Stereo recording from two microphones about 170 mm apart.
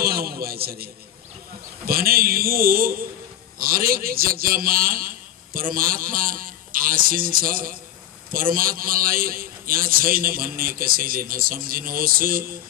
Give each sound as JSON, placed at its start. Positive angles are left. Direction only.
{"t": 0.0, "sound": "a man's voice", "side_deg": -65}
{"t": 1.9, "sound": "a man's voice", "side_deg": -60}